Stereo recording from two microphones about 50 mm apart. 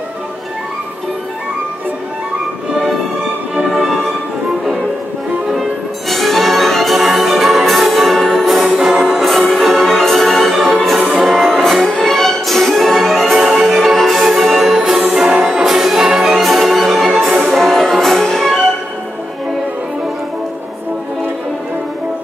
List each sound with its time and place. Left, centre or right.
2.7 s music: centre
5.5 s music: centre
8.7 s music: centre
9.2 s music: centre
15.0 s music: centre
15.6 s music: centre
16.3 s music: centre